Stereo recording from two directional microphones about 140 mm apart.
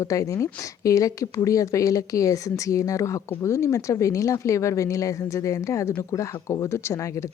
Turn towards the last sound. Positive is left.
turn(degrees=20)  # may be behind; listen again after turning